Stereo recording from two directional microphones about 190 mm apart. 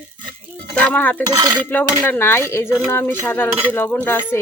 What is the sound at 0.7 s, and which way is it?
Speech, 10° left (ahead or behind).